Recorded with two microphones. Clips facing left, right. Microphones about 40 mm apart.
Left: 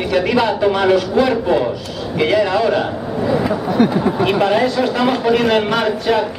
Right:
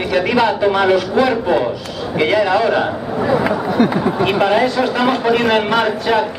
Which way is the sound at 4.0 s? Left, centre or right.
Centre.